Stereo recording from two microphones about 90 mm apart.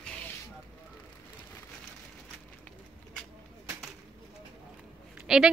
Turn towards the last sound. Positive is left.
turn(degrees=-5)  # may be behind; listen again after turning